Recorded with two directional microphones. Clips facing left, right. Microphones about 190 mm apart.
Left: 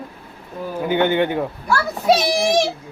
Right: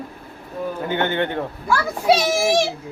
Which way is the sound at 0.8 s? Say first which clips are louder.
Left 5 dB; 15° left (ahead or behind).